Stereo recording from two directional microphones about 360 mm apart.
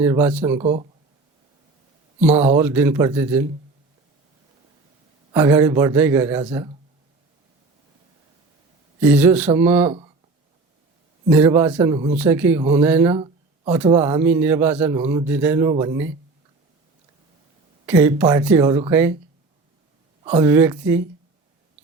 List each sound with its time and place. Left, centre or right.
0.0 s a man's voice: centre
0.6 s speech: centre
2.2 s a man's voice: centre
5.3 s a man's voice: centre
9.0 s a man's voice: centre
11.3 s a man's voice: centre
17.8 s a man's voice: centre
20.2 s a man's voice: centre